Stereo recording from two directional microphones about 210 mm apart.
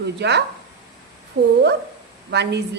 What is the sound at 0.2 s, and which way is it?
A woman's voice, 55° right (ahead or behind).